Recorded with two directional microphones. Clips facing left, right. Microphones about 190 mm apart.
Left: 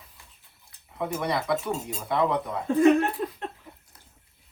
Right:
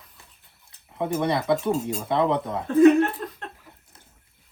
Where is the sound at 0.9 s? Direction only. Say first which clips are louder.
Right 4 dB; 25° right (ahead or behind).